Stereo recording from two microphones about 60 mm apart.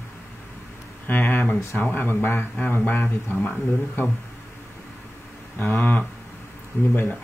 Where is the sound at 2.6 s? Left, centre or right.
Left.